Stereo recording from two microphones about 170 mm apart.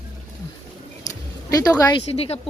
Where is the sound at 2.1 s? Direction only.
35° left (ahead or behind).